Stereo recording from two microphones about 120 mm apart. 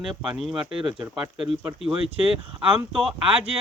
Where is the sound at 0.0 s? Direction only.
5° right (ahead or behind).